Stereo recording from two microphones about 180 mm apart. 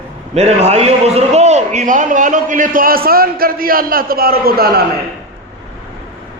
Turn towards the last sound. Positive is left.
turn(degrees=-55)  # may be behind; listen again after turning